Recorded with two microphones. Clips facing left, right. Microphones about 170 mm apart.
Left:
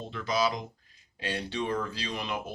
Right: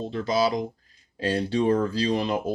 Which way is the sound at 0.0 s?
35° right (ahead or behind).